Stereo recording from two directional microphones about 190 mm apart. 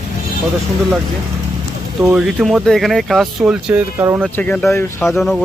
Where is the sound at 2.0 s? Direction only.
Centre (ahead or behind).